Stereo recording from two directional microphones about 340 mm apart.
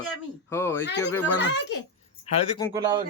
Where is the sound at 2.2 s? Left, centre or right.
Centre.